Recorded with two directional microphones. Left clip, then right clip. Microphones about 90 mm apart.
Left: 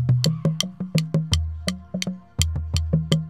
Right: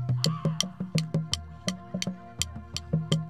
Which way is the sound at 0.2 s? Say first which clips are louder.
Left 3 dB; 25° left (ahead or behind).